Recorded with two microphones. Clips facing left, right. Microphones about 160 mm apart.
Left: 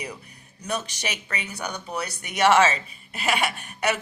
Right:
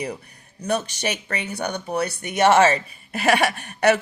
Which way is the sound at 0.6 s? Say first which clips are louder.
Right 6 dB; 50° right (ahead or behind).